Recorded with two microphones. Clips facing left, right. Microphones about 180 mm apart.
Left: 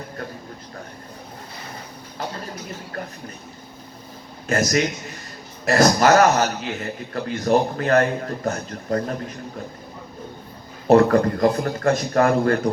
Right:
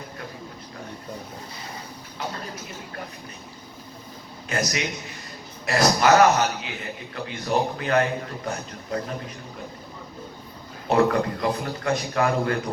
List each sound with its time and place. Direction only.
4.4 s a man's voice: 45° left (ahead or behind)
10.8 s a man's voice: 45° left (ahead or behind)